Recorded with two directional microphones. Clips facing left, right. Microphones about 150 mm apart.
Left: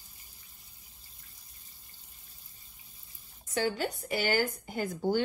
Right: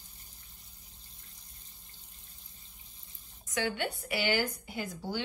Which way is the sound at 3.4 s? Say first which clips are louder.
Left 2 dB; 35° left (ahead or behind).